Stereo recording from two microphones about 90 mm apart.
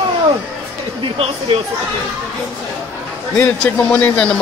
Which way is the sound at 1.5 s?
90° right.